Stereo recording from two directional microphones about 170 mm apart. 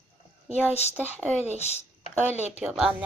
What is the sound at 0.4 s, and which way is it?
Speech, 5° right (ahead or behind).